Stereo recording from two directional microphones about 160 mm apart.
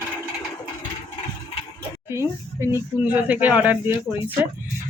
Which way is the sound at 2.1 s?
15° right (ahead or behind).